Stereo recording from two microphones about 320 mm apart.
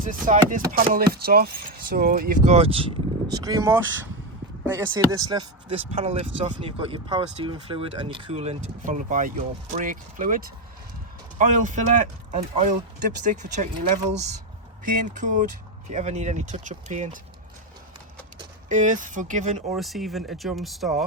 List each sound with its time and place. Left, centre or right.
0.0 s speech: right
18.3 s speech: right
19.7 s speech: centre